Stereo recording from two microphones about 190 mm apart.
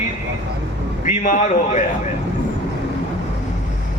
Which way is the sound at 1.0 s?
40° left (ahead or behind).